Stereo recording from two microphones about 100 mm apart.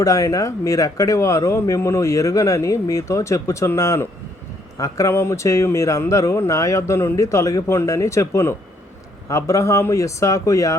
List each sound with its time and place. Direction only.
0.0 s speech: 35° left (ahead or behind)